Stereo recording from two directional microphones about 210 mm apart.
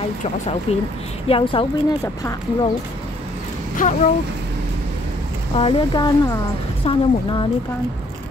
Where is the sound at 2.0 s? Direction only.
15° left (ahead or behind).